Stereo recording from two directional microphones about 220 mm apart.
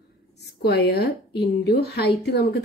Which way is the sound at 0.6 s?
50° left (ahead or behind).